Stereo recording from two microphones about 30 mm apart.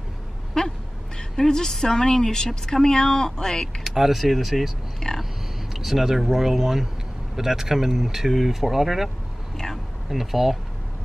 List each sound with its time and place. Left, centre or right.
0.6 s a woman's voice: centre
3.8 s speech: centre
5.0 s grunt: left
5.7 s a sound: centre
6.1 s speech: centre